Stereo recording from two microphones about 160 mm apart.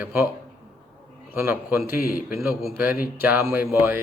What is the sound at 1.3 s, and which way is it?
Speech, 15° right (ahead or behind).